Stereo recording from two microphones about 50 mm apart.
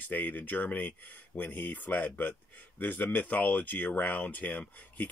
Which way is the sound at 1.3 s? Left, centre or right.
Left.